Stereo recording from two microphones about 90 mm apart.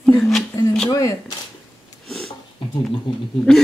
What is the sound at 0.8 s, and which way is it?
Speech, 40° left (ahead or behind).